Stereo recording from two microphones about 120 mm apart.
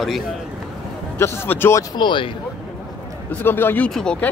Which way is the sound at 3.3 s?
20° left (ahead or behind).